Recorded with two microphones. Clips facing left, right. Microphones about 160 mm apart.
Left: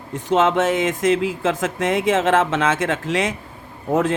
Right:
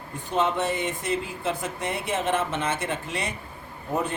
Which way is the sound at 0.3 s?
90° left.